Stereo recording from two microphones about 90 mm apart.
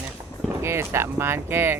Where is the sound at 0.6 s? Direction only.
30° right (ahead or behind).